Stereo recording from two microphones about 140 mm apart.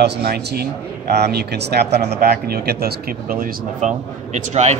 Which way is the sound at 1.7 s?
90° right.